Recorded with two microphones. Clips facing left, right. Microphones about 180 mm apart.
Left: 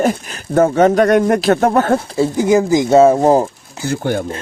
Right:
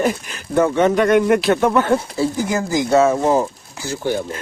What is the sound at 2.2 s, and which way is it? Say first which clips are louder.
Speech: left 7 dB; 20° left (ahead or behind).